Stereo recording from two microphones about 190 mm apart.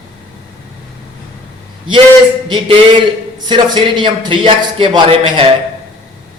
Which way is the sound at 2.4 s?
25° right (ahead or behind).